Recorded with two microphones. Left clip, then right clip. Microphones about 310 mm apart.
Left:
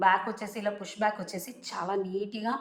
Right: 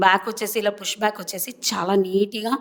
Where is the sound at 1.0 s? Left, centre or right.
Right.